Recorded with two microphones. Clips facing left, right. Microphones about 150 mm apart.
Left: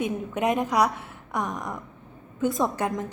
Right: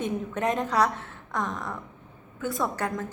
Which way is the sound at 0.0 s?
15° left (ahead or behind).